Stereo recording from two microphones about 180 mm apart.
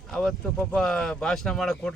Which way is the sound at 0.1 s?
5° left (ahead or behind).